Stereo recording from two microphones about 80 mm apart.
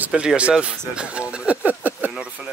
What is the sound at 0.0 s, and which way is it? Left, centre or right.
Speech, centre.